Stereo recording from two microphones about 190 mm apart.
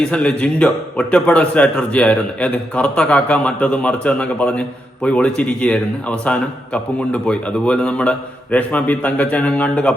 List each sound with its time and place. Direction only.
0.0 s a man's voice: 5° left (ahead or behind)